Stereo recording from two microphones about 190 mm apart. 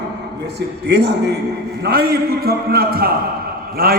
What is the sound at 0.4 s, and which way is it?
A man's voice, 60° right (ahead or behind).